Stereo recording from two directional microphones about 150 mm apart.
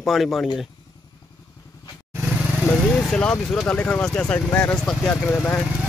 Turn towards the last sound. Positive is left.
turn(degrees=10)  # may be behind; listen again after turning